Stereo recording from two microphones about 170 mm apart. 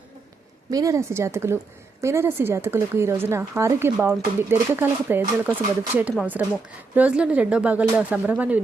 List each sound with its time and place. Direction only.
0.7 s speech: 20° right (ahead or behind)